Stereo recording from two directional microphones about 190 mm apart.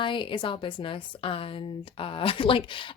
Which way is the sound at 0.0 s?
25° left (ahead or behind).